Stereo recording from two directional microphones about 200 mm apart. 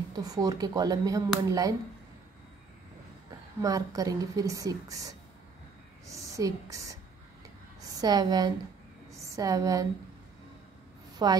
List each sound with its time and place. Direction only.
0.1 s a woman's voice: 20° right (ahead or behind)
3.3 s a woman's voice: 15° right (ahead or behind)
8.0 s a woman's voice: 20° right (ahead or behind)
11.2 s speech: 20° right (ahead or behind)